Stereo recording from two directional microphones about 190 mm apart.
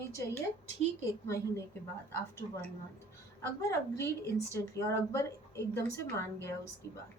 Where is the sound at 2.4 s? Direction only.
30° left (ahead or behind).